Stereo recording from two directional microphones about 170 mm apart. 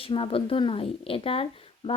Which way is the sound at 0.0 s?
35° left (ahead or behind).